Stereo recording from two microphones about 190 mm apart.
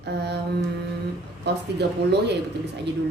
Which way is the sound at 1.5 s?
65° right (ahead or behind).